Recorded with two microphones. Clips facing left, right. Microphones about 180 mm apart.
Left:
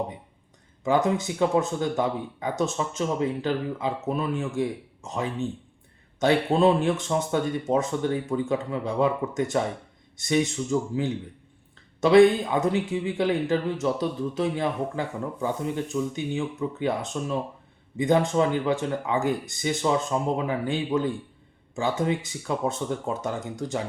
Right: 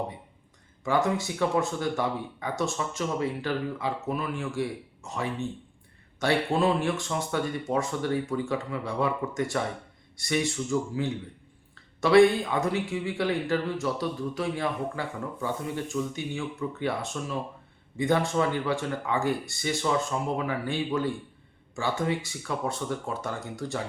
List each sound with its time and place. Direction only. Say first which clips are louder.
0.9 s speech: left 3 dB; 20° left (ahead or behind)